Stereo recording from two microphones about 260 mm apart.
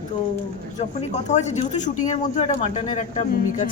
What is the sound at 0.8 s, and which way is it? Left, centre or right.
Speech, left.